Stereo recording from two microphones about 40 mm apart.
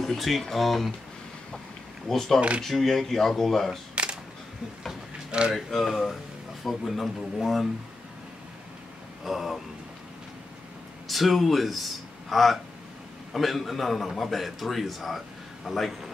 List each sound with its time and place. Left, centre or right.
0.0 s a man's voice: centre
2.0 s speech: centre
3.9 s camera: right
5.5 s a man's voice: centre
9.2 s a man's voice: centre
11.1 s a man's voice: centre